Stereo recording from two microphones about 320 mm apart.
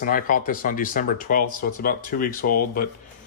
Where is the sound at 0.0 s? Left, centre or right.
Left.